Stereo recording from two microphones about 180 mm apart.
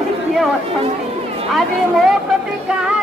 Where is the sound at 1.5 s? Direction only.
Centre (ahead or behind).